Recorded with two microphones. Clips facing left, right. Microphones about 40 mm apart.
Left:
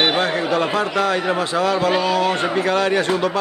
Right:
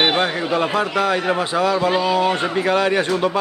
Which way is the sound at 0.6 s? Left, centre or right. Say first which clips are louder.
Right 3 dB; centre.